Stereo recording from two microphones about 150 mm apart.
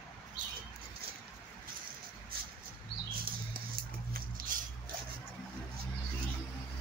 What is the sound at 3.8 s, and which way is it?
Horse, 80° right.